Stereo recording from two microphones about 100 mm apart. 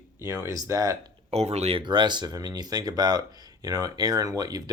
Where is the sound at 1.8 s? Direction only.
50° right (ahead or behind).